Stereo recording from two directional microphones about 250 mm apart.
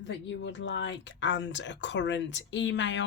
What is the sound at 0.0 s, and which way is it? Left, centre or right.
Speech, left.